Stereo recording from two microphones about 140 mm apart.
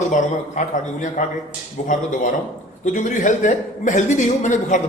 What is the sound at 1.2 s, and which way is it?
Speech, 70° left (ahead or behind).